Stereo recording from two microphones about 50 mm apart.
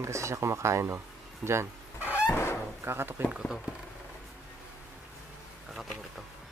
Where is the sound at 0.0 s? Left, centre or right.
Right.